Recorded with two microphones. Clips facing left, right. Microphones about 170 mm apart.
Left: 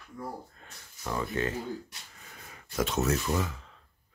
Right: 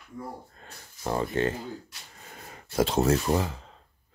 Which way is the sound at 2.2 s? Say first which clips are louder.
Right 7 dB; 40° right (ahead or behind).